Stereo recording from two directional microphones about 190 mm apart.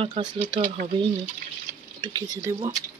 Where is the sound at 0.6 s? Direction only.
45° right (ahead or behind).